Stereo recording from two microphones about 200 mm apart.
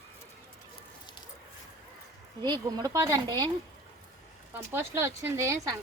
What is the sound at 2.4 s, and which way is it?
Speech, 20° right (ahead or behind).